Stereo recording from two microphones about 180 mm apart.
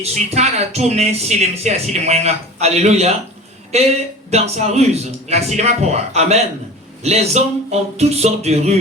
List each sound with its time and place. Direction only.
0.0 s speech: 35° right (ahead or behind)